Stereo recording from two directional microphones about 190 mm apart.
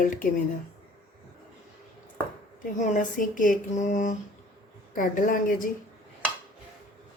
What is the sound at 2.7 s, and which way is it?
Speech, 40° left (ahead or behind).